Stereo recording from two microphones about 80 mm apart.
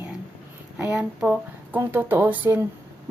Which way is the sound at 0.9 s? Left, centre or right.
Centre.